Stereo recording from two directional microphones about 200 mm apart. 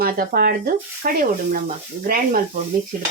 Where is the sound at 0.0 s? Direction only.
50° right (ahead or behind).